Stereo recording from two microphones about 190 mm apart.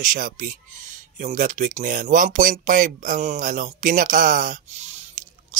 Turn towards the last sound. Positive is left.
turn(degrees=-35)  # may be behind; listen again after turning